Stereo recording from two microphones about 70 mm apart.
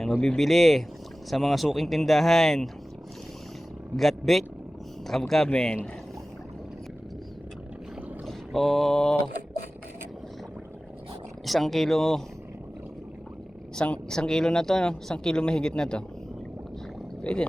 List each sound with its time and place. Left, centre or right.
0.1 s speech: centre
3.9 s speech: centre
8.3 s a sound: centre
11.4 s speech: centre
13.7 s speech: centre